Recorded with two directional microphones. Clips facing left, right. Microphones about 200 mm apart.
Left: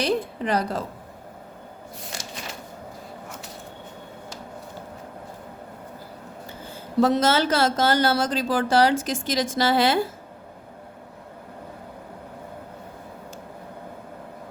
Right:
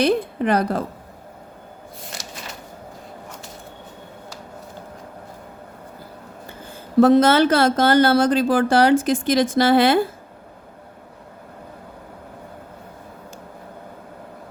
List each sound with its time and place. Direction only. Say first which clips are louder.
0.0 s speech: right 5 dB; 55° right (ahead or behind)
7.0 s speech: right 6 dB; 55° right (ahead or behind)